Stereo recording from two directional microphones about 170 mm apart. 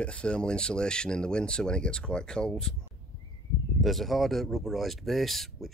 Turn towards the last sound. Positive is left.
turn(degrees=0)  # may be behind; listen again after turning